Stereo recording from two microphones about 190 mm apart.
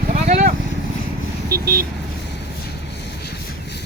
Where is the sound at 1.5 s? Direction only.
55° right (ahead or behind).